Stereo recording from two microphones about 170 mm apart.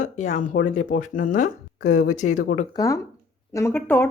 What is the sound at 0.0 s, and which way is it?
Speech, 45° left (ahead or behind).